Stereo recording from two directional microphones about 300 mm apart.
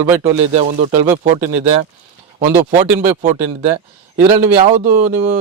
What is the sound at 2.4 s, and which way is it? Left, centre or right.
A man's voice, right.